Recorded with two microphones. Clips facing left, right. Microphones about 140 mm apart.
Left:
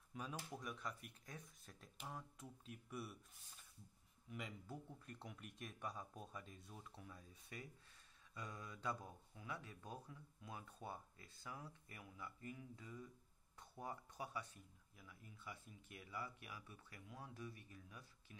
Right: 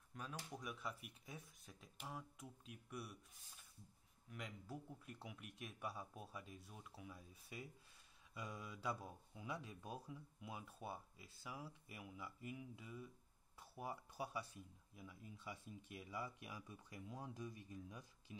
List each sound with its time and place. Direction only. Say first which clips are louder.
0.1 s speech: left 2 dB; 5° left (ahead or behind); by 18.0 s 20° right (ahead or behind)